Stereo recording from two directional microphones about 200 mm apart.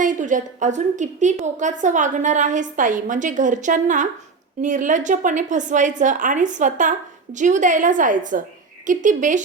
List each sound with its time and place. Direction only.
0.0 s a woman's voice: 40° right (ahead or behind)